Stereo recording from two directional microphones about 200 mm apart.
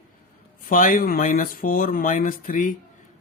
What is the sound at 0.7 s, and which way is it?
Speech, 45° left (ahead or behind).